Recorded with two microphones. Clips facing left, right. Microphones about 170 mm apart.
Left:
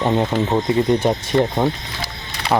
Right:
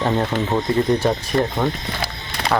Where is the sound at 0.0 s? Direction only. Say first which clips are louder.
Left 2 dB; 15° left (ahead or behind).